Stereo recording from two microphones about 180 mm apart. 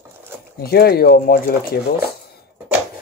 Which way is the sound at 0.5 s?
60° left (ahead or behind).